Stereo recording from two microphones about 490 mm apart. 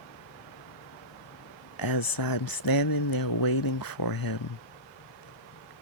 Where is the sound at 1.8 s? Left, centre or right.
Left.